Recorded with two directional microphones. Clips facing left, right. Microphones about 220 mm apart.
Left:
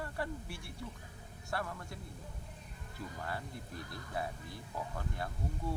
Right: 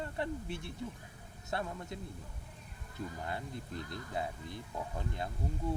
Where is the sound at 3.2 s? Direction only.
20° right (ahead or behind).